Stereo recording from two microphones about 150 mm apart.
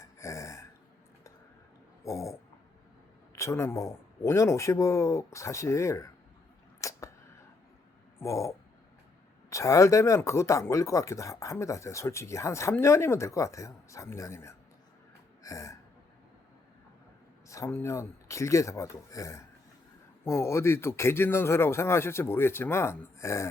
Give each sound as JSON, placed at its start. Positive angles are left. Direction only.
{"t": 0.0, "sound": "gasp", "side_deg": 20}
{"t": 2.0, "sound": "speech", "side_deg": 20}
{"t": 6.8, "sound": "a sound", "side_deg": 20}
{"t": 8.2, "sound": "speech", "side_deg": 20}
{"t": 17.5, "sound": "speech", "side_deg": 20}